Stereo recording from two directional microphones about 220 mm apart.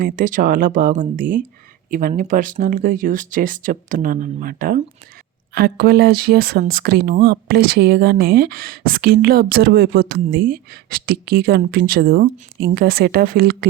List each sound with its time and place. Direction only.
0.0 s speech: 40° right (ahead or behind)